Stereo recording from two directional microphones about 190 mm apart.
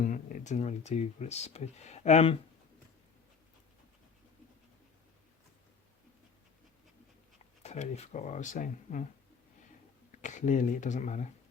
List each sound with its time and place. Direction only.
0.0 s speech: 40° left (ahead or behind)
7.6 s speech: 35° left (ahead or behind)
10.1 s speech: 40° left (ahead or behind)